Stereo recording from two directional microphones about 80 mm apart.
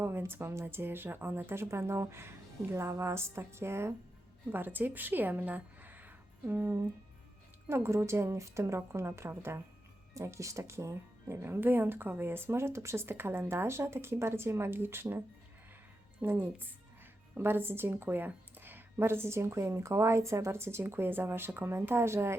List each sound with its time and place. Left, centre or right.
0.0 s a woman's voice: right
7.7 s speech: right
16.2 s speech: right